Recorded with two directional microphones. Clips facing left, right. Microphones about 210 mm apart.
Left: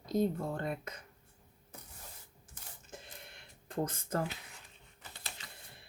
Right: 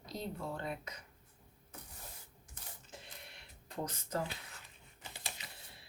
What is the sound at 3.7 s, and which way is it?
Speech, 50° left (ahead or behind).